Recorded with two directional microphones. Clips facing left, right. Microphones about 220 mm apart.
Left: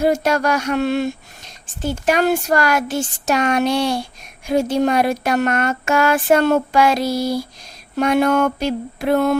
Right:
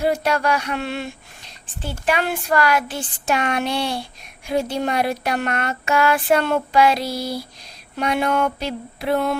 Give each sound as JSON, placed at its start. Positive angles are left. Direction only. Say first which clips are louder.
{"t": 0.0, "sound": "speech", "louder": "left 3 dB", "side_deg": 45}